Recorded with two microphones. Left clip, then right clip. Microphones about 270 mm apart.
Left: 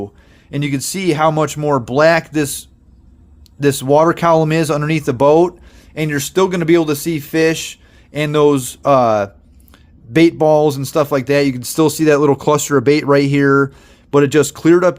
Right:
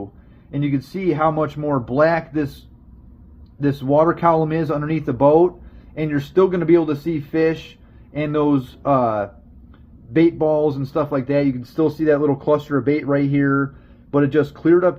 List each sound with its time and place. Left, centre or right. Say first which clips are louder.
0.5 s speech: left 3 dB; left
3.6 s speech: left 5 dB; left